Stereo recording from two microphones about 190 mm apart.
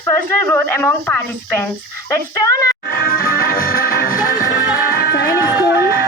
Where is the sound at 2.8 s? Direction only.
50° left (ahead or behind).